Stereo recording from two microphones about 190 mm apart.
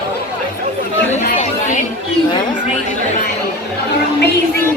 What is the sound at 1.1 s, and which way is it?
Chatter, 40° left (ahead or behind).